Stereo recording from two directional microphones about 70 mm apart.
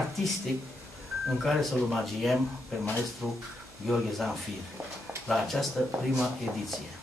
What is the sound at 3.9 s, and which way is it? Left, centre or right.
Speech, centre.